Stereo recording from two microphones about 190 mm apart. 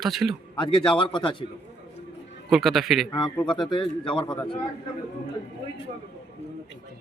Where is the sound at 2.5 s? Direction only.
Centre (ahead or behind).